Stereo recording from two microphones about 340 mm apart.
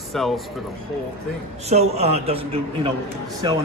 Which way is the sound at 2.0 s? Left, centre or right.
Centre.